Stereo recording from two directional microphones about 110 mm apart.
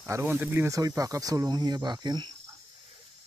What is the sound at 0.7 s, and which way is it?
Speech, 30° right (ahead or behind).